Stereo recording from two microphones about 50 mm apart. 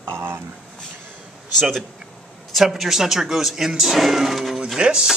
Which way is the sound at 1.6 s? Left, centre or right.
Centre.